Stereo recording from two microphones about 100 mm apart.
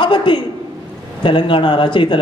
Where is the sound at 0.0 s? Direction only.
55° left (ahead or behind).